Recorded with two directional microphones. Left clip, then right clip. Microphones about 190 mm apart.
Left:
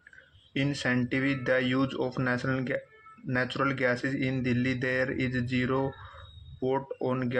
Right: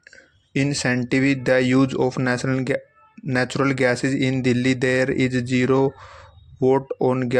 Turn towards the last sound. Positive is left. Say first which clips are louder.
# right 10 dB
turn(degrees=-50)  # may be behind; listen again after turning